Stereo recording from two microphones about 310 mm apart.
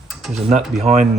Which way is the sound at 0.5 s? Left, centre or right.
Right.